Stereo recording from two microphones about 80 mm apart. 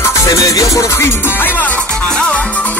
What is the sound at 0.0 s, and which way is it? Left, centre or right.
Music, left.